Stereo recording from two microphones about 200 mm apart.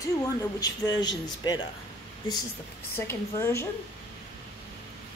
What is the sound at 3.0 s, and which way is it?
Speech, 10° left (ahead or behind).